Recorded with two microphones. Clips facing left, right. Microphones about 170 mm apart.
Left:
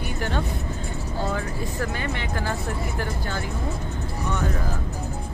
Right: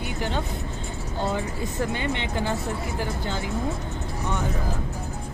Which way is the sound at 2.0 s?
20° right (ahead or behind).